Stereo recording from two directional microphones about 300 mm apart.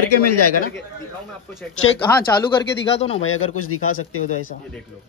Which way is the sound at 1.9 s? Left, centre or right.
Centre.